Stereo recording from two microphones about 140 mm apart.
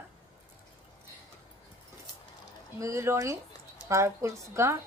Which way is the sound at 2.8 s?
20° right (ahead or behind).